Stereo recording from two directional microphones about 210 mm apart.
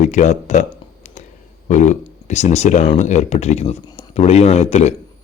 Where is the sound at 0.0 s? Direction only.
35° left (ahead or behind).